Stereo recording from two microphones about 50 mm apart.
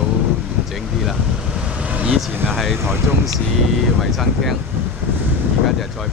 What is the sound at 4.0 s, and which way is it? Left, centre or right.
Speech, centre.